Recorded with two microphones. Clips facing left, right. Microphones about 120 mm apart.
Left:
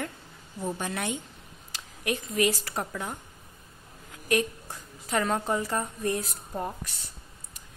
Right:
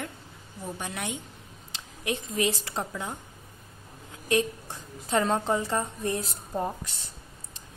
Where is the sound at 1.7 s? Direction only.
25° right (ahead or behind).